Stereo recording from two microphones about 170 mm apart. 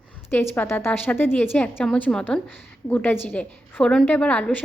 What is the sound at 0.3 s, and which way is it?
A woman's voice, 10° left (ahead or behind).